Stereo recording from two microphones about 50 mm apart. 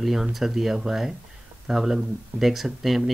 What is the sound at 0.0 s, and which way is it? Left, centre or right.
Speech, centre.